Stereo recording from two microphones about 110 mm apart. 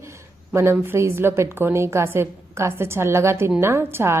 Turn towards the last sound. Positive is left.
turn(degrees=-25)  # may be behind; listen again after turning